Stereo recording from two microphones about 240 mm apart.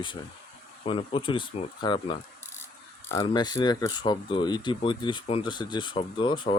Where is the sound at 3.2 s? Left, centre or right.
Centre.